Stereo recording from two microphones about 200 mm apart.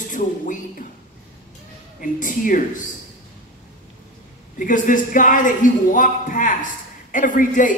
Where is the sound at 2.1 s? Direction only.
40° left (ahead or behind).